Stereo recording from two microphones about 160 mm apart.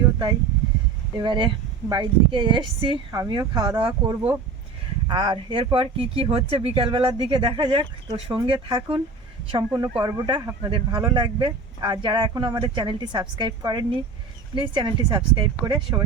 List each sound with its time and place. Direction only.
1.1 s speech: 30° right (ahead or behind)